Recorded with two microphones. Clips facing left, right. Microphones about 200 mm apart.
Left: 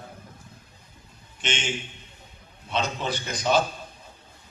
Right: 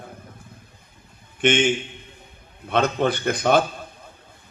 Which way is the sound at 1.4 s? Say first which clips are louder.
Right 11 dB; 55° right (ahead or behind).